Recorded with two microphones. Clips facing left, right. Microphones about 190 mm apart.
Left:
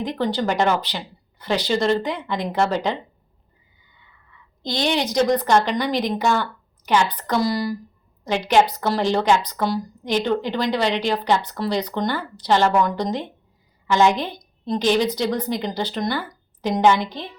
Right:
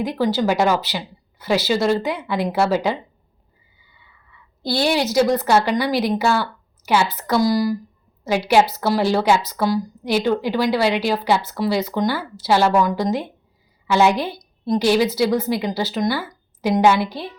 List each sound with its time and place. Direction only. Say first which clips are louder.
0.0 s a woman's voice: right 3 dB; 5° right (ahead or behind)